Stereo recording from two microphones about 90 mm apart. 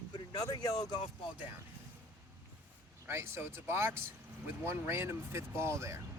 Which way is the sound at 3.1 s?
25° right (ahead or behind).